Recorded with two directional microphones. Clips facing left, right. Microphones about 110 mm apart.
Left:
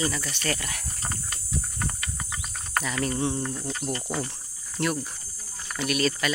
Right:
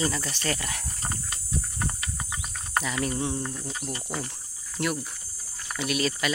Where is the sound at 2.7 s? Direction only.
15° right (ahead or behind); by 3.9 s centre (ahead or behind).